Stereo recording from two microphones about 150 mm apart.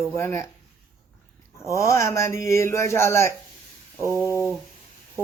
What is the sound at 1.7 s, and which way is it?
A man's voice, 20° left (ahead or behind).